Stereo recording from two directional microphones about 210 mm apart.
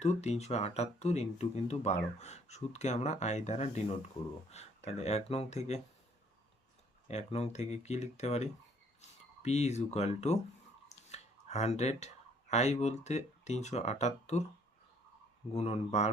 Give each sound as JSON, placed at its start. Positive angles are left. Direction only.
{"t": 0.0, "sound": "speech", "side_deg": 30}
{"t": 7.1, "sound": "speech", "side_deg": 30}
{"t": 15.5, "sound": "speech", "side_deg": 30}